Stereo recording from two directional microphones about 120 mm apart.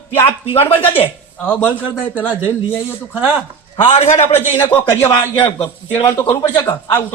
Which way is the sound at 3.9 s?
60° left (ahead or behind).